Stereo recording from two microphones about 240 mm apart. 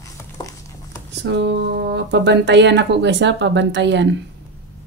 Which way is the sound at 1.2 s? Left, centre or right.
Right.